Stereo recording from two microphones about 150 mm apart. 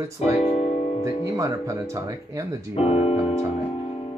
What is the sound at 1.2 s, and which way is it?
Speech, 20° right (ahead or behind).